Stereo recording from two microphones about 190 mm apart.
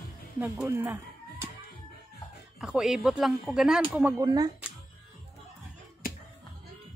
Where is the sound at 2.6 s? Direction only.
5° right (ahead or behind).